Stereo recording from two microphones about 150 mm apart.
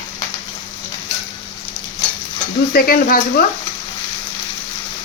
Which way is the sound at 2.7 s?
80° left.